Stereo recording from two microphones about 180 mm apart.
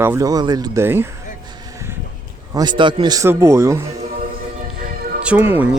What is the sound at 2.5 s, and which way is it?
A man's voice, 25° right (ahead or behind).